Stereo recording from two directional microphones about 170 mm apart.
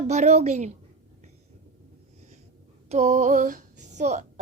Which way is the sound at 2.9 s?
40° right (ahead or behind).